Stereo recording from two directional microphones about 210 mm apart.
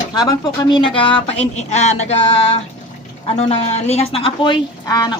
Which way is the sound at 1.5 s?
30° left (ahead or behind).